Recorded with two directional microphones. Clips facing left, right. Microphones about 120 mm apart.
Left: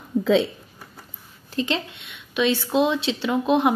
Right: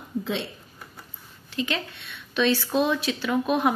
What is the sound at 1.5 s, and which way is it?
Speech, 35° left (ahead or behind).